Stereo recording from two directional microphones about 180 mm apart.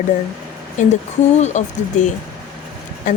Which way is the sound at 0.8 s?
45° left (ahead or behind).